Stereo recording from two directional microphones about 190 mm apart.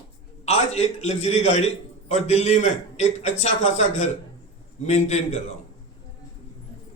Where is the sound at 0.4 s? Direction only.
35° left (ahead or behind).